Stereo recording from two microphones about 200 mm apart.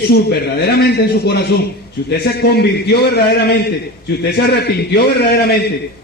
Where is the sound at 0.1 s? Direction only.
55° left (ahead or behind).